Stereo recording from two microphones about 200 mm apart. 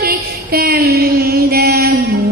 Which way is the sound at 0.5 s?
50° right (ahead or behind).